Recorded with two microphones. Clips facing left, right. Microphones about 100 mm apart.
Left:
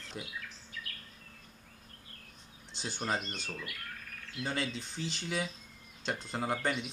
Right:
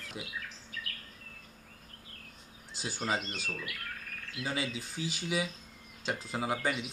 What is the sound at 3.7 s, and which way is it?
Bird, 50° right (ahead or behind).